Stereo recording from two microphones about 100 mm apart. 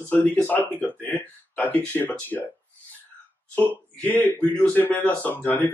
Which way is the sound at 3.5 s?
15° left (ahead or behind).